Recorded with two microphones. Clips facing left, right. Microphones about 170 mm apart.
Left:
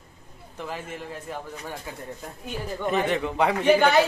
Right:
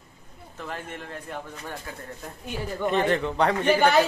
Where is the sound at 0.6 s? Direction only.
5° left (ahead or behind).